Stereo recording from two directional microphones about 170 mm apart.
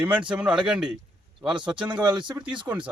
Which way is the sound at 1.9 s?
25° right (ahead or behind).